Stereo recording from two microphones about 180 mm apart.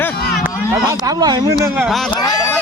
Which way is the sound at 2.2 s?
20° left (ahead or behind).